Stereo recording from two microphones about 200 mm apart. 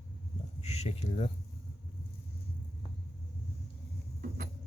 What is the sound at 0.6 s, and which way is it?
Speech, 30° left (ahead or behind).